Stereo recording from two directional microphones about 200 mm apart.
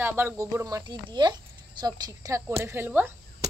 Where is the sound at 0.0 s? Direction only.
10° right (ahead or behind).